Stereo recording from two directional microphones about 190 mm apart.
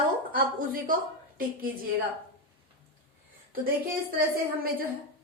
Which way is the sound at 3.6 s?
50° right (ahead or behind).